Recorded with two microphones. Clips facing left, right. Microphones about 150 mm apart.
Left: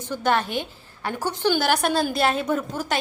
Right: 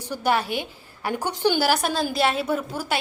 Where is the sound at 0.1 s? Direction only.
10° right (ahead or behind).